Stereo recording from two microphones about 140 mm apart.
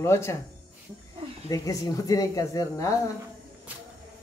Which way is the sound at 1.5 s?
25° left (ahead or behind).